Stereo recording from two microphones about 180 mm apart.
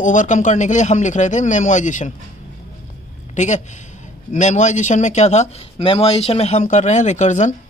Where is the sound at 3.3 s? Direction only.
40° left (ahead or behind).